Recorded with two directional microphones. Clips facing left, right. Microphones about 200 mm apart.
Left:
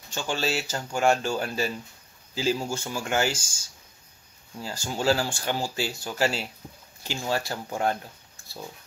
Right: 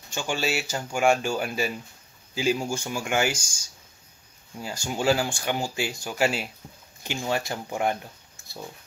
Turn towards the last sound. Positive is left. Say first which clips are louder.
# even
turn(degrees=-15)  # may be behind; listen again after turning